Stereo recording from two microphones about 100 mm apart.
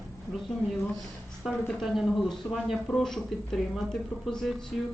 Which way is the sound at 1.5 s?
Centre (ahead or behind).